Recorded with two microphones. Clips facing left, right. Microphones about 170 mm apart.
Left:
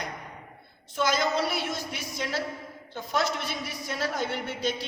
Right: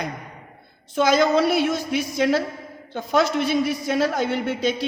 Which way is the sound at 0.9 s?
85° right.